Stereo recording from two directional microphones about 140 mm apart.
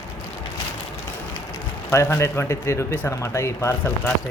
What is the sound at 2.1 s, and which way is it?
Speech, 20° left (ahead or behind).